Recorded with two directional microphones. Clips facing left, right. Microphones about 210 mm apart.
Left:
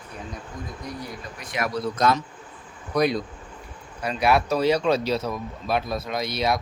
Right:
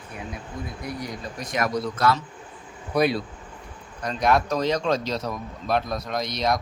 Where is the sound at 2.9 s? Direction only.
5° right (ahead or behind).